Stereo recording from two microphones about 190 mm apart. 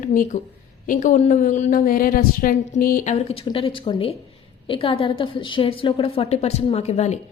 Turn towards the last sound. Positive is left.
turn(degrees=35)  # may be behind; listen again after turning